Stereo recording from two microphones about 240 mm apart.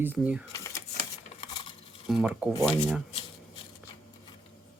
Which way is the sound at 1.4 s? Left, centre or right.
Left.